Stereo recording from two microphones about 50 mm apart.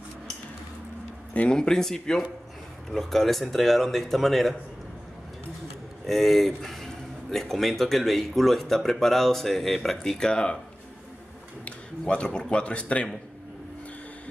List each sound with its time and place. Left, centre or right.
1.5 s speech: centre
6.0 s speech: centre
10.1 s speech: centre
12.1 s speech: centre